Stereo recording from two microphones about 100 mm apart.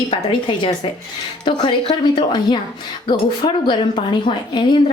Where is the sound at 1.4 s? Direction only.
50° left (ahead or behind).